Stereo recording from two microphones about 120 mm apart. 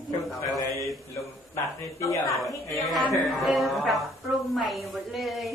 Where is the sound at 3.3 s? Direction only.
Centre (ahead or behind).